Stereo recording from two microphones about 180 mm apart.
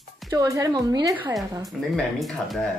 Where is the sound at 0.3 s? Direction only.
20° right (ahead or behind).